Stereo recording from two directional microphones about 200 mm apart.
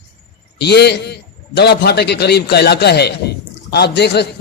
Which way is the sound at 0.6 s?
55° left (ahead or behind).